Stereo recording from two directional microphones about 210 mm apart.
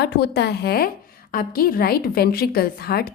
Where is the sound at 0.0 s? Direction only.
50° left (ahead or behind).